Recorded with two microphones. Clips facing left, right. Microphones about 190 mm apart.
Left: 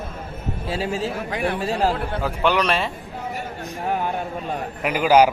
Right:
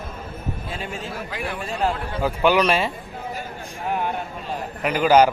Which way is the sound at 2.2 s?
5° right (ahead or behind).